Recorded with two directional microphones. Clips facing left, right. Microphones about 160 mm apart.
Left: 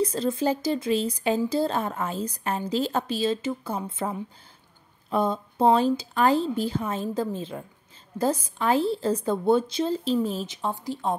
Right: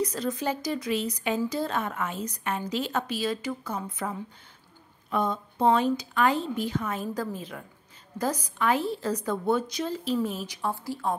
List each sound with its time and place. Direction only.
0.0 s a woman's voice: 30° left (ahead or behind)